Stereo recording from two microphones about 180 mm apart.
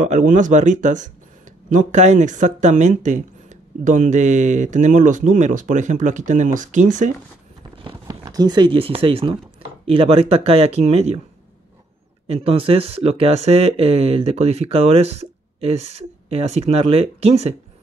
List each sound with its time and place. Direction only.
0.0 s speech: 45° right (ahead or behind)
7.7 s a sound: 25° right (ahead or behind)
8.2 s speech: 20° right (ahead or behind); by 11.1 s 35° right (ahead or behind)
12.3 s speech: 30° right (ahead or behind)